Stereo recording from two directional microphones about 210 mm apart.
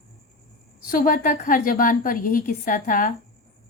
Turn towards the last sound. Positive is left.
turn(degrees=40)  # may be behind; listen again after turning